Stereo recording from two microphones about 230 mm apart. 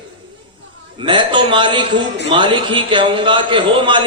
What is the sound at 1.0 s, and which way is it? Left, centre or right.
A man's voice, right.